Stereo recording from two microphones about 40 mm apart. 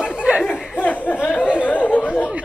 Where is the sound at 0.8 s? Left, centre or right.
Left.